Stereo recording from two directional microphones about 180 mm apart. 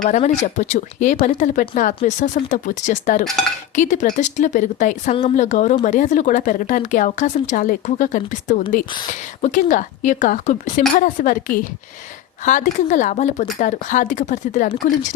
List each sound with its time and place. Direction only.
0.0 s speech: 40° left (ahead or behind)